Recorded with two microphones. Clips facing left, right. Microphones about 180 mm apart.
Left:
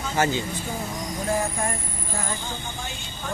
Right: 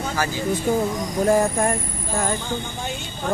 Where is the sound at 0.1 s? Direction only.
25° left (ahead or behind).